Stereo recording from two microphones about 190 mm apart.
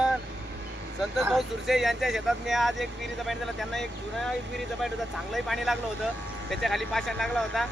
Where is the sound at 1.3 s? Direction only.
Centre (ahead or behind).